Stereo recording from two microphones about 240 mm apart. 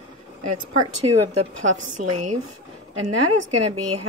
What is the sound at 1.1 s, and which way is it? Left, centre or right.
Speech, right.